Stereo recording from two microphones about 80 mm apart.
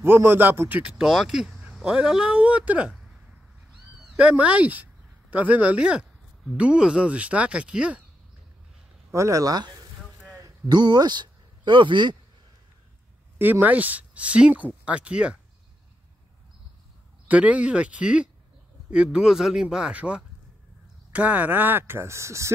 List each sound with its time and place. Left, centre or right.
0.0 s speech: right
0.9 s speech: centre
4.2 s speech: centre
9.1 s speech: right
10.4 s speech: right
13.4 s speech: right
17.3 s speech: centre; by 22.5 s right